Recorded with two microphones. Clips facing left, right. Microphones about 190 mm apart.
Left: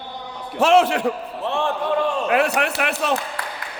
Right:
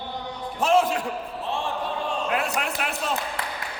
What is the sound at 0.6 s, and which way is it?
Speech, 75° left (ahead or behind).